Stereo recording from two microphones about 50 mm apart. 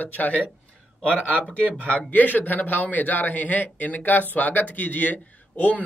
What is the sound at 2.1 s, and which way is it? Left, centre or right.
A man's voice, left.